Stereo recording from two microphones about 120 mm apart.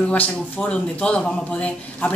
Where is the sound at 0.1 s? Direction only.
10° left (ahead or behind).